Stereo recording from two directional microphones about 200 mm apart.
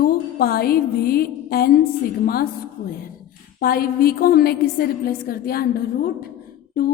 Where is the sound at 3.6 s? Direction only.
50° left (ahead or behind).